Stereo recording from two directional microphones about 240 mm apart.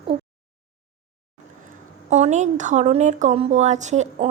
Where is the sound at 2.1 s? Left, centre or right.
Right.